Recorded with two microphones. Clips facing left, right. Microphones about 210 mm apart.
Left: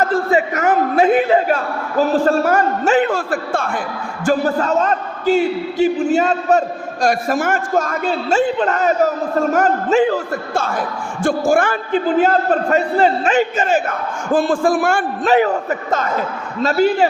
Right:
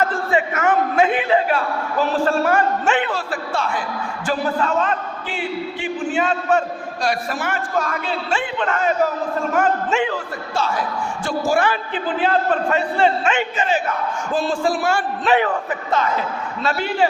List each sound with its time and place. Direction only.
0.0 s a man's voice: 40° left (ahead or behind)